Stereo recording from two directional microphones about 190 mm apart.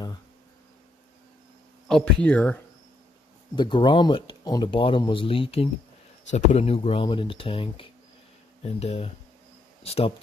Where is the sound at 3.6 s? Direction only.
25° left (ahead or behind).